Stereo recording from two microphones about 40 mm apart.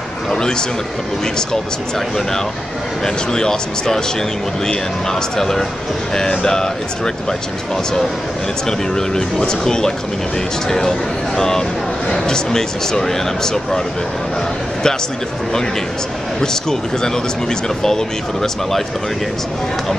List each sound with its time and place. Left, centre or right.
0.3 s speech: centre
3.3 s speech: centre
5.4 s speech: centre
8.6 s speech: centre
16.3 s speech: centre